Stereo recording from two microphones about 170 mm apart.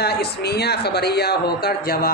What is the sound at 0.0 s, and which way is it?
Speech, 70° left (ahead or behind).